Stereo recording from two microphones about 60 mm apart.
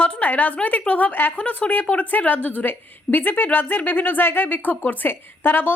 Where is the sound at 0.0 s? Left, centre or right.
Left.